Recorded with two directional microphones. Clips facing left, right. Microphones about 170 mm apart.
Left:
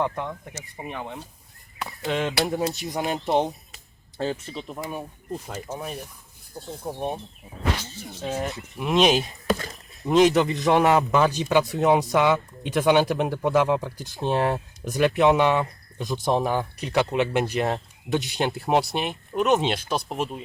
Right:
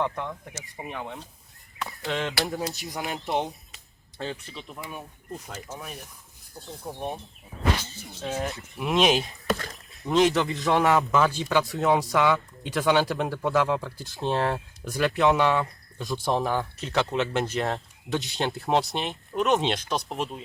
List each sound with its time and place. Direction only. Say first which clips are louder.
0.0 s speech: left 2 dB; 5° left (ahead or behind)
2.0 s speech: left 4 dB; 20° left (ahead or behind)
4.2 s speech: left 6 dB; 40° left (ahead or behind)
5.3 s speech: left 5 dB; 25° left (ahead or behind)
6.8 s speech: left 4 dB; 30° left (ahead or behind)
8.0 s speech: left 3 dB; centre (ahead or behind)
10.0 s speech: left 4 dB; 20° left (ahead or behind)
18.8 s speech: left 3 dB; centre (ahead or behind)